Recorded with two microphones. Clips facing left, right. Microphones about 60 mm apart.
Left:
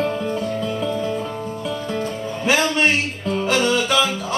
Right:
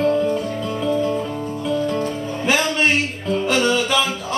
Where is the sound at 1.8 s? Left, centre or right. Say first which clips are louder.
Right 2 dB; centre.